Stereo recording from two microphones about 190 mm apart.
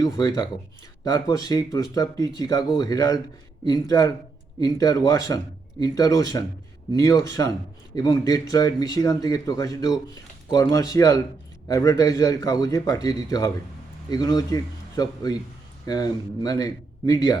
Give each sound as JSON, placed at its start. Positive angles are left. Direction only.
{"t": 0.0, "sound": "a man's voice", "side_deg": 20}